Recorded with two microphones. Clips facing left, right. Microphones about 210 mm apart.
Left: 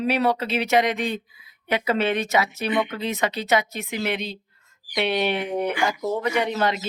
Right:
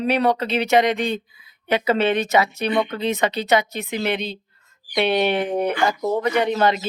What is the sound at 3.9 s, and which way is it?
Speech, 35° right (ahead or behind).